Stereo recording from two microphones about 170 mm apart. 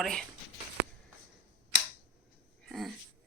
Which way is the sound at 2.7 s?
Centre (ahead or behind).